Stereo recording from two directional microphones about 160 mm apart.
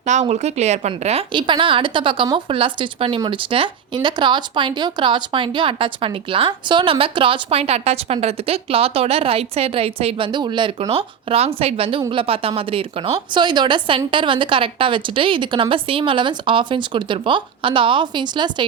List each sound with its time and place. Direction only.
0.0 s speech: 45° right (ahead or behind); by 18.6 s 30° right (ahead or behind)